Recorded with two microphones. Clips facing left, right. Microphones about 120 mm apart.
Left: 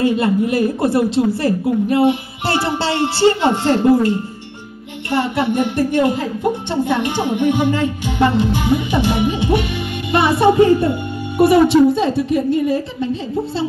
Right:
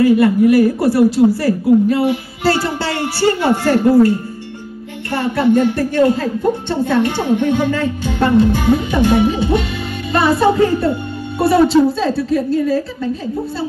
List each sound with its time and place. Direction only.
0.0 s a woman's voice: 20° left (ahead or behind)